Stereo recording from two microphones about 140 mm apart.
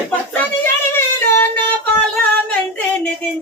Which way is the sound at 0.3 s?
15° left (ahead or behind).